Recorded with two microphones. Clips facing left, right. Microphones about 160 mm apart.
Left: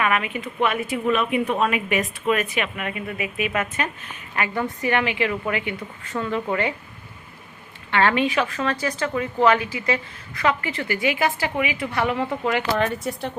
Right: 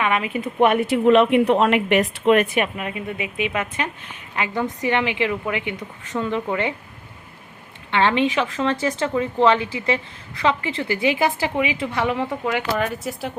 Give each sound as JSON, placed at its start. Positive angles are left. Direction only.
{"t": 0.0, "sound": "a woman's voice", "side_deg": -25}
{"t": 0.6, "sound": "a woman's voice", "side_deg": -60}
{"t": 2.7, "sound": "a woman's voice", "side_deg": -25}
{"t": 7.9, "sound": "a woman's voice", "side_deg": -20}